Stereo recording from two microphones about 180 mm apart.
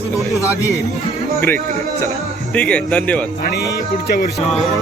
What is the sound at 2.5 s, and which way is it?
Speech, 5° left (ahead or behind).